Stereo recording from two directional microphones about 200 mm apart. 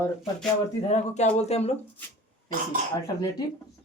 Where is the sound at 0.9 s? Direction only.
35° left (ahead or behind).